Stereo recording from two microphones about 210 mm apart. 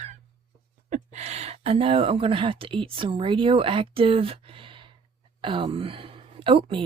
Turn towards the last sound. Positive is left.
turn(degrees=-25)  # may be behind; listen again after turning